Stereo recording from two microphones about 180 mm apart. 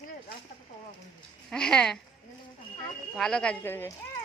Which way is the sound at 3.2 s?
5° left (ahead or behind).